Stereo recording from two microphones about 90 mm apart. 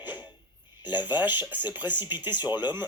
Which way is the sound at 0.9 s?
55° left (ahead or behind).